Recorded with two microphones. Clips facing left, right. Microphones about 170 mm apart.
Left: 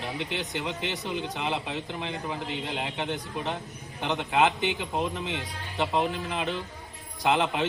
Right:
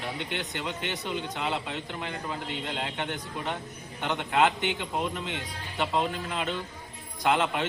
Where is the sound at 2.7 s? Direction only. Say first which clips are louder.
Even; 5° left (ahead or behind).